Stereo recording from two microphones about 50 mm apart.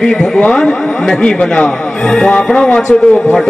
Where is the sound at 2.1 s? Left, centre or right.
Centre.